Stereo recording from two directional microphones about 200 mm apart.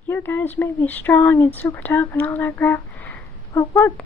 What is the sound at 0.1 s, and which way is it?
A woman's voice, 10° left (ahead or behind).